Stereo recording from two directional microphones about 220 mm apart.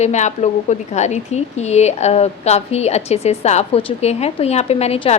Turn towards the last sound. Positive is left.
turn(degrees=30)  # may be behind; listen again after turning